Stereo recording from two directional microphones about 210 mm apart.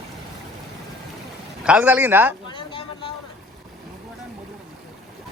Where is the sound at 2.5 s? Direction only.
25° left (ahead or behind).